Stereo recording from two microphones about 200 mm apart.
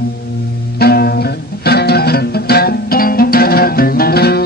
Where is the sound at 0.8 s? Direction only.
50° left (ahead or behind).